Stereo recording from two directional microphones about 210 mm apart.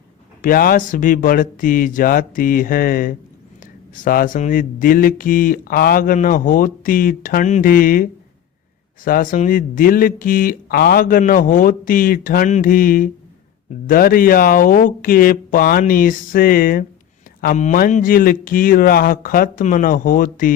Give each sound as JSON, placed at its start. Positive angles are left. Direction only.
{"t": 0.4, "sound": "speech", "side_deg": 45}